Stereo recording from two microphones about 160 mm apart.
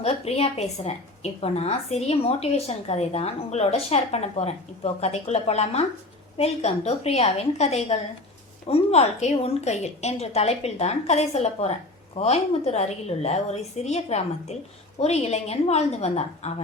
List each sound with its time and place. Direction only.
0.0 s a woman's voice: 40° left (ahead or behind)